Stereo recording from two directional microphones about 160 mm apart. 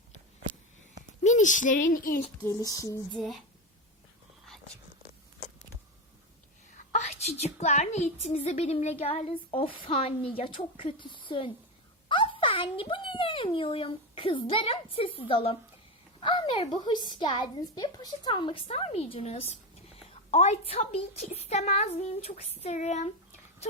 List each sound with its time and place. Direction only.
1.2 s a child's voice: 50° left (ahead or behind)
2.4 s a sound: 20° left (ahead or behind)
3.2 s speech: centre (ahead or behind)
6.7 s a woman's voice: 45° left (ahead or behind)